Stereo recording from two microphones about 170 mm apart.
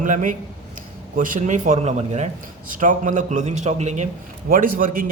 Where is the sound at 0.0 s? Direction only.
50° right (ahead or behind).